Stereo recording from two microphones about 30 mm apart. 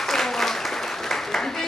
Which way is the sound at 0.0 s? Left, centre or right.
Centre.